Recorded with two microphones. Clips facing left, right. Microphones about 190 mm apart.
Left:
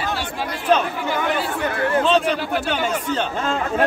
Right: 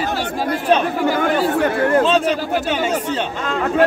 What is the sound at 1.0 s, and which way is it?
Chatter, 45° right (ahead or behind).